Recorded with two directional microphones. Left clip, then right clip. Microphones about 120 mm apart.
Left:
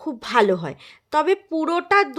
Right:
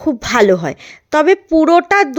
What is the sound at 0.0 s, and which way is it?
A woman's voice, 35° right (ahead or behind).